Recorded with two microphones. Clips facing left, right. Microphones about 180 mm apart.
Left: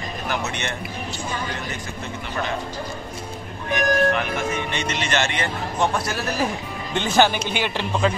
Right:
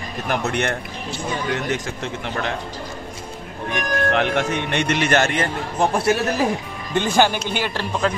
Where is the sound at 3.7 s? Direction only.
75° right (ahead or behind); by 5.8 s 45° right (ahead or behind).